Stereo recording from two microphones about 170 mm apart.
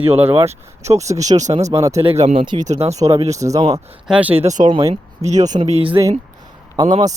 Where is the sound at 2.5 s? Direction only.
40° right (ahead or behind).